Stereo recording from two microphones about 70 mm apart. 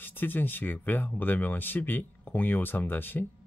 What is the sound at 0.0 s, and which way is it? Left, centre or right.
Speech, left.